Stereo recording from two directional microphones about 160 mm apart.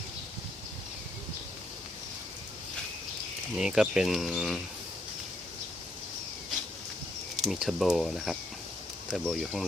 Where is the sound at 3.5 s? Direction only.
5° right (ahead or behind).